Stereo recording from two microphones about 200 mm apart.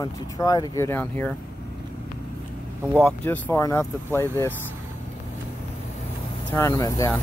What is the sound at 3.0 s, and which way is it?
Speech, 10° left (ahead or behind).